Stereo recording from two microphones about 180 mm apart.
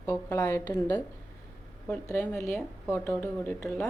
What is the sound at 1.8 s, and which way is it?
Speech, 10° left (ahead or behind).